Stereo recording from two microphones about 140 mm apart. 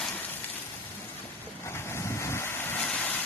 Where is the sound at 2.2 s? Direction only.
20° left (ahead or behind).